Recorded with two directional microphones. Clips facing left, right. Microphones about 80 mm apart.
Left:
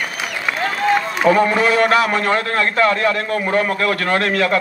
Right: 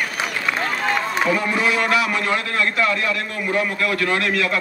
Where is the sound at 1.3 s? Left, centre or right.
Left.